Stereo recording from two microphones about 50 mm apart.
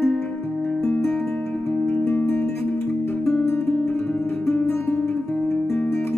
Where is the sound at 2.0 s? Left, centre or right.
Left.